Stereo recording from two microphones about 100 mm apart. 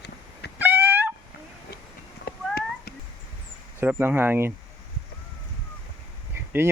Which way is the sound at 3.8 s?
20° right (ahead or behind).